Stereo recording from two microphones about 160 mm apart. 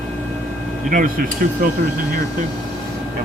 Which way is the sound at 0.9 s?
60° right (ahead or behind).